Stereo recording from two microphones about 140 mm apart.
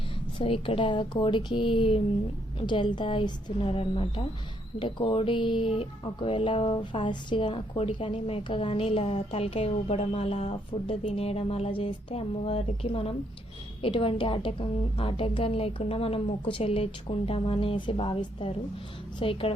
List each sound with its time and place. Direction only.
0.3 s a woman's voice: 40° left (ahead or behind)